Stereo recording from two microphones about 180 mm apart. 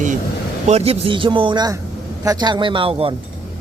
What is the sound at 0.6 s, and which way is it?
A man's voice, 35° right (ahead or behind).